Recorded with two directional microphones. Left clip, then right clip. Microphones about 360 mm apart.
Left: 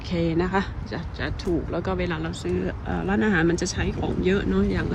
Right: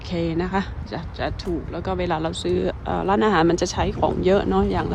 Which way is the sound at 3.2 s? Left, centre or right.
Centre.